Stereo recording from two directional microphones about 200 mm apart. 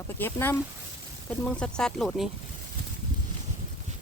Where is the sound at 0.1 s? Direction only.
10° left (ahead or behind).